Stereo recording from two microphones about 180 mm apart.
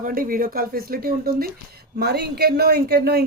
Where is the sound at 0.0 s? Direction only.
50° right (ahead or behind).